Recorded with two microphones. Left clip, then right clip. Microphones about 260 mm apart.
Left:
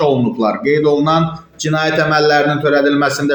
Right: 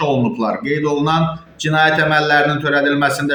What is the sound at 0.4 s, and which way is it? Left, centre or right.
A man's voice, centre.